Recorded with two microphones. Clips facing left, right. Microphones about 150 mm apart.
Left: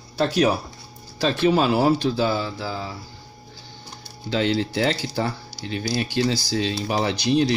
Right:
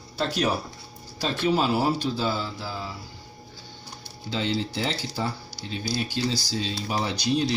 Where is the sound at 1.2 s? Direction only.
90° left.